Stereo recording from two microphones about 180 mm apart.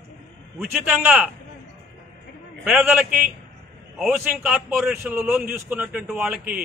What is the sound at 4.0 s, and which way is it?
A man's voice, 5° right (ahead or behind).